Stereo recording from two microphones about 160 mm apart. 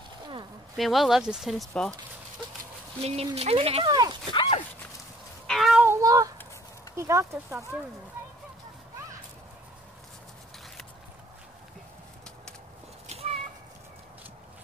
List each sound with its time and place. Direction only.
0.7 s speech: centre (ahead or behind)
3.0 s speech: 40° right (ahead or behind)
3.9 s speech: 25° right (ahead or behind)
4.3 s speech: 30° left (ahead or behind)
5.5 s child singing: centre (ahead or behind)
5.9 s child singing: 20° right (ahead or behind)
7.0 s speech: 15° right (ahead or behind)
13.1 s cat: 40° right (ahead or behind)